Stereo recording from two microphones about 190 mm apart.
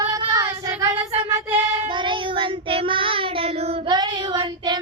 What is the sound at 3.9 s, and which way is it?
Child singing, 20° right (ahead or behind).